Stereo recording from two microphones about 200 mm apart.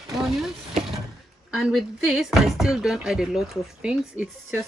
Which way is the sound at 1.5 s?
Centre (ahead or behind).